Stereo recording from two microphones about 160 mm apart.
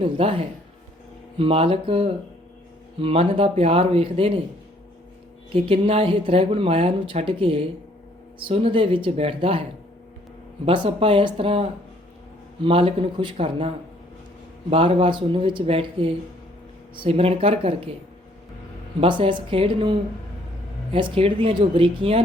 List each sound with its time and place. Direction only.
0.0 s speech: 35° right (ahead or behind)
5.6 s speech: 35° right (ahead or behind)
10.7 s speech: 35° right (ahead or behind)
14.7 s speech: 35° right (ahead or behind)
18.9 s speech: 35° right (ahead or behind)
20.9 s speech: 35° right (ahead or behind)